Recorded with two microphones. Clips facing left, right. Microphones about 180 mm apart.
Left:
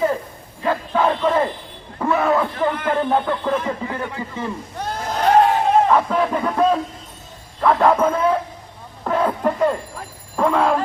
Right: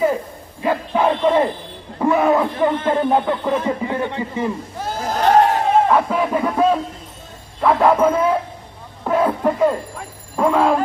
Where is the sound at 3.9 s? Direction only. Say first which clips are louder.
Right 5 dB; 25° right (ahead or behind).